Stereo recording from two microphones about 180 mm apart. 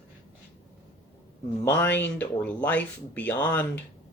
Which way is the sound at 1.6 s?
10° left (ahead or behind).